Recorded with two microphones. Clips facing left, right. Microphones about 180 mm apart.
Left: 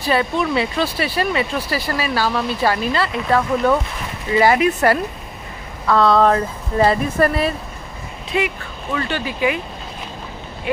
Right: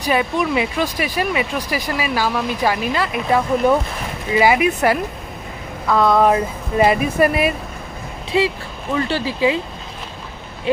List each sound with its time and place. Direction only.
0.0 s speech: 15° right (ahead or behind)
8.3 s speech: 25° right (ahead or behind)